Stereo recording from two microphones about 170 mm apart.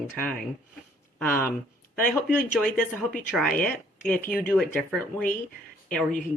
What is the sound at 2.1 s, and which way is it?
Speech, 5° left (ahead or behind).